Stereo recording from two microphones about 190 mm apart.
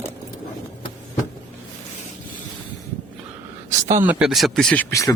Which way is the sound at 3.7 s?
40° right (ahead or behind).